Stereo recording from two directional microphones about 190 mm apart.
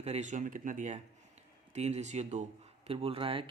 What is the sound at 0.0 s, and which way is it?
Speech, 35° right (ahead or behind).